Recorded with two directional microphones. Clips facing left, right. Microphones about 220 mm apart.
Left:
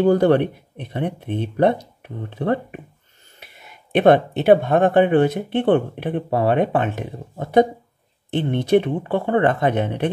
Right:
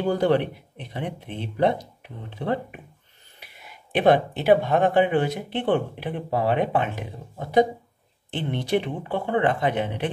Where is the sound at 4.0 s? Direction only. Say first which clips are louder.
Left 5 dB; 55° left (ahead or behind).